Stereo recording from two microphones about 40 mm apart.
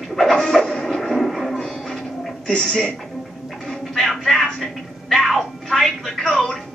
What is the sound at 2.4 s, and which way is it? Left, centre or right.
Speech, left.